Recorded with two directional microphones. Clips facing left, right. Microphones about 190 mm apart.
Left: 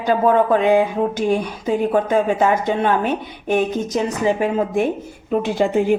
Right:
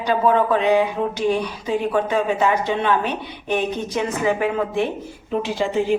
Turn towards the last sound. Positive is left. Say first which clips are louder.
# left 4 dB
turn(degrees=55)  # may be behind; listen again after turning